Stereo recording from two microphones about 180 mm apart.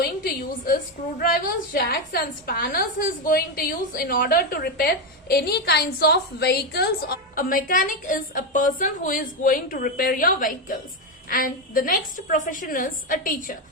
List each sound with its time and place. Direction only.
0.0 s a woman's voice: 55° left (ahead or behind)